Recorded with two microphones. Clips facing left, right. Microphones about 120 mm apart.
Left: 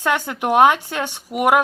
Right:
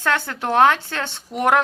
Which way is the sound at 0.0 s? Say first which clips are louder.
Left 2 dB; 15° left (ahead or behind).